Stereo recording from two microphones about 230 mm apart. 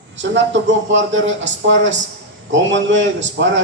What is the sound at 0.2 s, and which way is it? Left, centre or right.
A man's voice, right.